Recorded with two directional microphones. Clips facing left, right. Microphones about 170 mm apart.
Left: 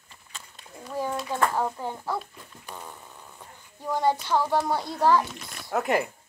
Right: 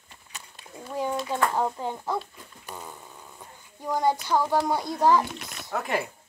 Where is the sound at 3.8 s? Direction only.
15° right (ahead or behind).